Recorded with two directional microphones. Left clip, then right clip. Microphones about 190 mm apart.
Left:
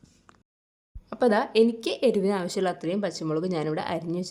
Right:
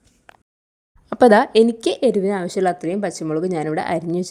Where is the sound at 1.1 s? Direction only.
35° right (ahead or behind).